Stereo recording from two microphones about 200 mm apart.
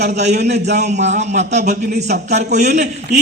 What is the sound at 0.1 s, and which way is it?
A man's voice, 35° right (ahead or behind).